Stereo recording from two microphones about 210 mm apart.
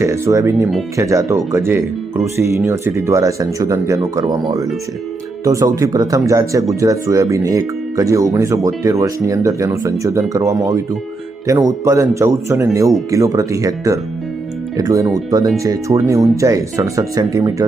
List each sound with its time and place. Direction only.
0.0 s speech: 15° right (ahead or behind)
11.4 s speech: 15° right (ahead or behind)